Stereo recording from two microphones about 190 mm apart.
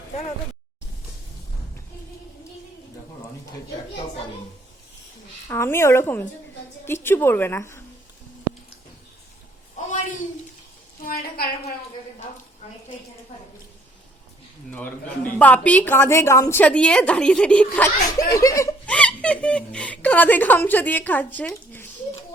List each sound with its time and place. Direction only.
5.5 s speech: 15° left (ahead or behind)
14.7 s speech: 10° left (ahead or behind)